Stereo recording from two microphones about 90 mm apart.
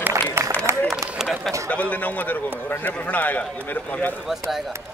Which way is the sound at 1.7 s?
20° left (ahead or behind).